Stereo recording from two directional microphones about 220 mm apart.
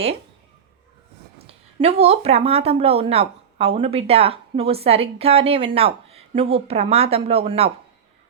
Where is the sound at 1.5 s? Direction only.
25° right (ahead or behind).